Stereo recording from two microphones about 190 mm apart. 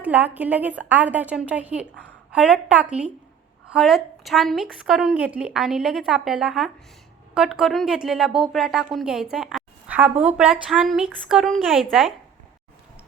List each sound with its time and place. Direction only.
0.0 s a woman's voice: 10° right (ahead or behind)